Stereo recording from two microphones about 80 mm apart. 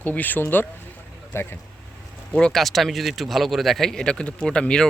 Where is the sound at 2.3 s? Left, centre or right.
Centre.